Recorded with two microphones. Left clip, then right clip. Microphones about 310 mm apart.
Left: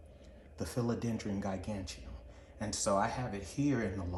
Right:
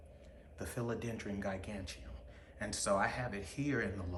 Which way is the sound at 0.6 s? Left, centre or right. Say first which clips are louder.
Left 4 dB; centre.